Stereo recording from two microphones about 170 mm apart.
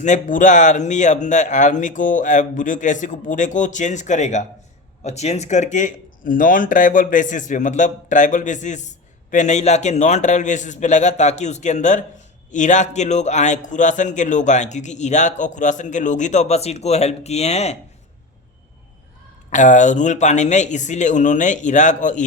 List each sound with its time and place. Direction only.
0.0 s speech: 45° left (ahead or behind)
19.5 s speech: 45° left (ahead or behind)